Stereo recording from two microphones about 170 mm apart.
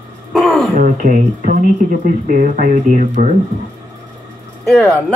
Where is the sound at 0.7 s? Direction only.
50° right (ahead or behind).